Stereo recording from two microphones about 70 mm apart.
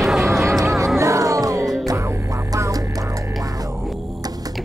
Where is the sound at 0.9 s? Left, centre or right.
Right.